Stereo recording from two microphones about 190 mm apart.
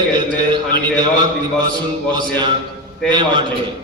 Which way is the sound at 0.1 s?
25° right (ahead or behind).